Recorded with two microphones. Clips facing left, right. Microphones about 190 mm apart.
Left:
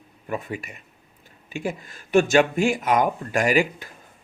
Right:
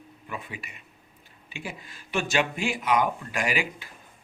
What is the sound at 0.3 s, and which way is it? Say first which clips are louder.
A man's voice: left 9 dB; 45° left (ahead or behind).